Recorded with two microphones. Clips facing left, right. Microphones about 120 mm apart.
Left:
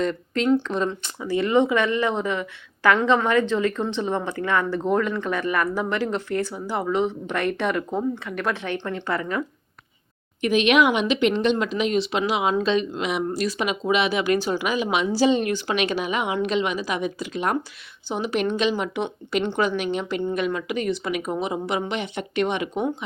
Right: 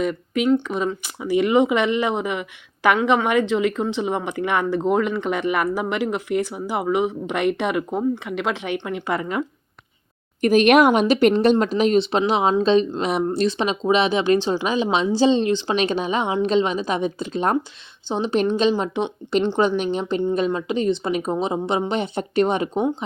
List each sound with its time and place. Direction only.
0.0 s speech: 10° right (ahead or behind)
10.4 s a woman's voice: 45° right (ahead or behind)